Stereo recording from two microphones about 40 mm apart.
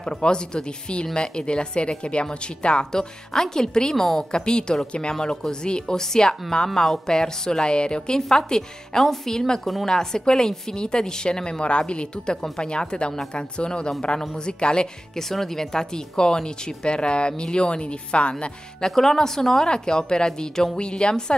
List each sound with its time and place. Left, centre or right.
0.0 s a woman's voice: left
4.3 s a woman's voice: left
15.1 s speech: centre; by 18.3 s left
18.9 s speech: centre